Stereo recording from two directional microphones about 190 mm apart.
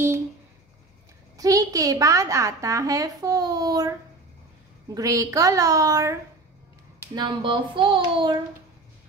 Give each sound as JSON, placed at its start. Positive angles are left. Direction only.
{"t": 1.3, "sound": "a woman's voice", "side_deg": -20}
{"t": 7.2, "sound": "child singing", "side_deg": -25}